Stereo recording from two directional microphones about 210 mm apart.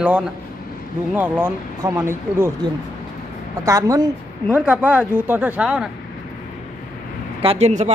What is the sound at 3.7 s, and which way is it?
Speech, 15° right (ahead or behind).